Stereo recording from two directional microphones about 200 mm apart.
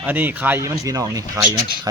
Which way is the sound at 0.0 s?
10° right (ahead or behind).